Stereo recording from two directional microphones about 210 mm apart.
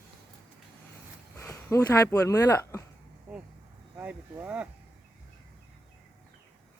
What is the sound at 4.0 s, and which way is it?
Speech, 5° right (ahead or behind).